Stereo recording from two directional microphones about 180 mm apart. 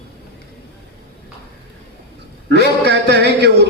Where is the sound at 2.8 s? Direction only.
70° right (ahead or behind).